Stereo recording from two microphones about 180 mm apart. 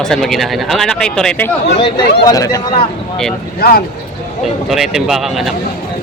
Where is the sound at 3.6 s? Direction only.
60° left (ahead or behind).